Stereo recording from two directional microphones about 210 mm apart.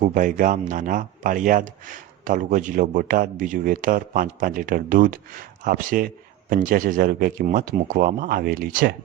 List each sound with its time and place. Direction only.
0.1 s speech: 40° right (ahead or behind)